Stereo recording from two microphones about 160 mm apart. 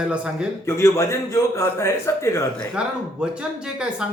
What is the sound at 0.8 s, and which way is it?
A man's voice, 15° left (ahead or behind).